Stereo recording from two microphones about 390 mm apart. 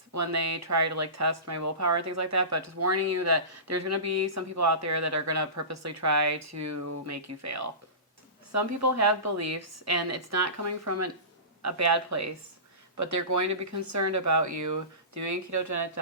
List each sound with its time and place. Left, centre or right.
0.1 s a woman's voice: right